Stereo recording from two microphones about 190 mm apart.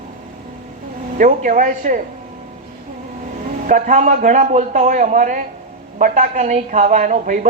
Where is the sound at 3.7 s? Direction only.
40° right (ahead or behind).